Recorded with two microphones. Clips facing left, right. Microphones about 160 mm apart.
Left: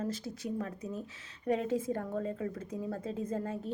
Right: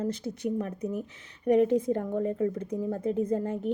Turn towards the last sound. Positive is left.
turn(degrees=-20)  # may be behind; listen again after turning